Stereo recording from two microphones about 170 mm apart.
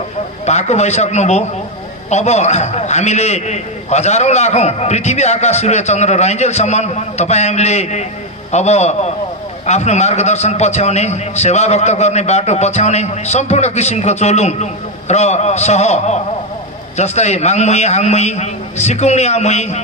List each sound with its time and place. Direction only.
0.5 s a man's voice: 40° left (ahead or behind)